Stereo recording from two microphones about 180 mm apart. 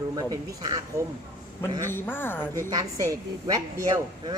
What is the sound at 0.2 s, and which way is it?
Speech, 20° right (ahead or behind).